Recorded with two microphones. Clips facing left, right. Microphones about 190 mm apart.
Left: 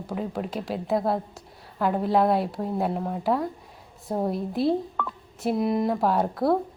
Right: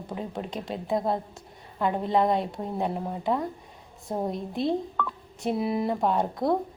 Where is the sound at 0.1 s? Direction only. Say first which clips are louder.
Left 4 dB; 5° left (ahead or behind).